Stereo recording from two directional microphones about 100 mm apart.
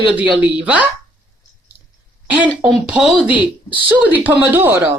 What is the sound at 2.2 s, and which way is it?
Speech, 15° right (ahead or behind).